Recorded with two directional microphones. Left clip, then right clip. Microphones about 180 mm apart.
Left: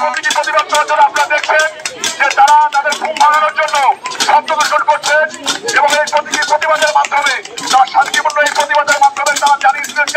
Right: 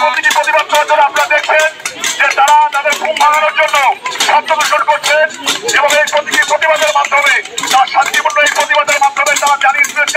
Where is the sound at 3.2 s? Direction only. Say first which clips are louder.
Even; 15° left (ahead or behind).